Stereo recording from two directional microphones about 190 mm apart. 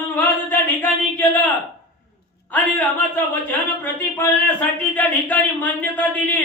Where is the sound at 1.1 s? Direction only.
10° left (ahead or behind).